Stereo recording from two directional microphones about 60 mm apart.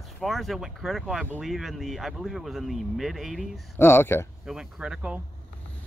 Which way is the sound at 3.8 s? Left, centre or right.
Left.